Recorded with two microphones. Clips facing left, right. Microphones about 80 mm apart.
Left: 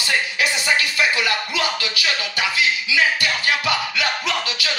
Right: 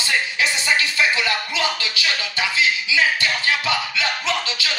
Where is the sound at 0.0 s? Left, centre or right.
Right.